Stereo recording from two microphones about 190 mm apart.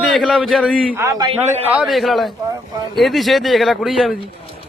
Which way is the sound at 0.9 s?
15° right (ahead or behind).